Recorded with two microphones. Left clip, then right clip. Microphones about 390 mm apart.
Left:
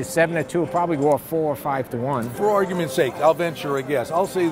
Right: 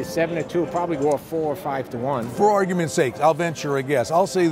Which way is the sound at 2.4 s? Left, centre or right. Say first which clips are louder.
Right 2 dB; right.